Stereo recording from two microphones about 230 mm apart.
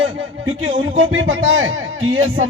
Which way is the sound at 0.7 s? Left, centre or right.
Right.